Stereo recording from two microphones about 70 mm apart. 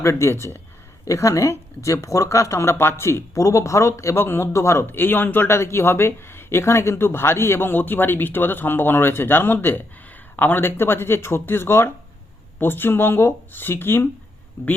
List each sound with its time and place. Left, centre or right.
0.0 s speech: left
4.9 s speech: left